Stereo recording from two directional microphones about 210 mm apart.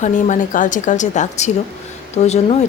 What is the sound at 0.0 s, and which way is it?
Speech, 35° left (ahead or behind).